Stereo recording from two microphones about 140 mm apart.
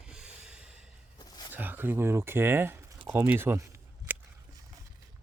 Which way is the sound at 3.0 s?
15° right (ahead or behind).